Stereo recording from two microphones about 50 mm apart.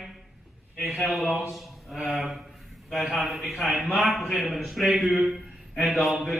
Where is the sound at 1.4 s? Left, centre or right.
Centre.